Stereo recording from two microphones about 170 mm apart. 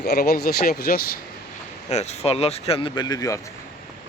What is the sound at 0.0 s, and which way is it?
Speech, 65° left (ahead or behind).